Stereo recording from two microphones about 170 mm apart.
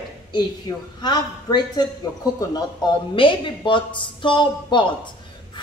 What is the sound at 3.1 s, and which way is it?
Speech, 30° left (ahead or behind).